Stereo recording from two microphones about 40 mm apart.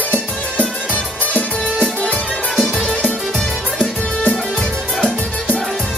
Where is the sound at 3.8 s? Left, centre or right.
Left.